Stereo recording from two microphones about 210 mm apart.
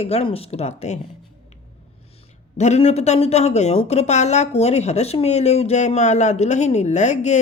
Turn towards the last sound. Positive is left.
turn(degrees=35)  # may be behind; listen again after turning